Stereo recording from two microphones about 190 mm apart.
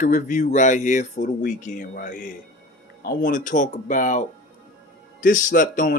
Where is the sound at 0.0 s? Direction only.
40° left (ahead or behind).